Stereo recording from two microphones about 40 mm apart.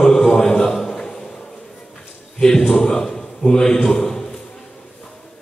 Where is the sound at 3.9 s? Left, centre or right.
Centre.